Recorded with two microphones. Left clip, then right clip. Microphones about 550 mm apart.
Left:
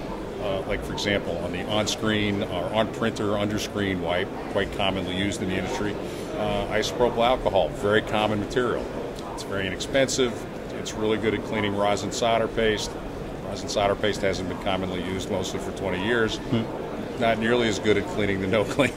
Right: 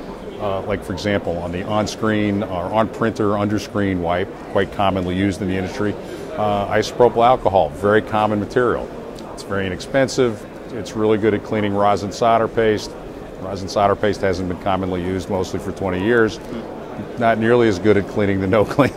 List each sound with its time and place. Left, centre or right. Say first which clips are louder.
0.7 s speech: right 4 dB; right